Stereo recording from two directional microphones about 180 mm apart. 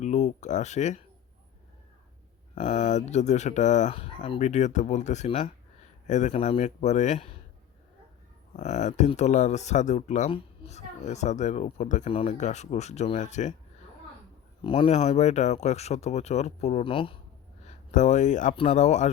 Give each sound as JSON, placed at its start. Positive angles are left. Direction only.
{"t": 0.0, "sound": "speech", "side_deg": 40}
{"t": 2.6, "sound": "speech", "side_deg": 40}
{"t": 8.5, "sound": "speech", "side_deg": 40}
{"t": 14.6, "sound": "speech", "side_deg": 30}
{"t": 17.7, "sound": "speech", "side_deg": 40}
{"t": 18.5, "sound": "speech", "side_deg": 35}